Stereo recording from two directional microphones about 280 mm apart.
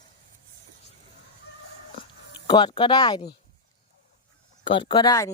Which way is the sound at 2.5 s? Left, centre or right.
Centre.